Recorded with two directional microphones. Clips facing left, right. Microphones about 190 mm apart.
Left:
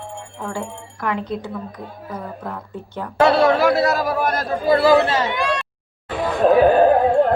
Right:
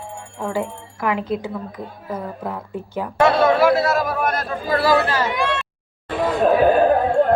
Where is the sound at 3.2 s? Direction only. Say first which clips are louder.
Even; 35° left (ahead or behind).